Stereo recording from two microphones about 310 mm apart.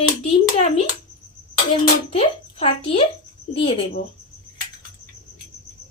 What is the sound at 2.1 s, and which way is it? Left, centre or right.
Speech, centre.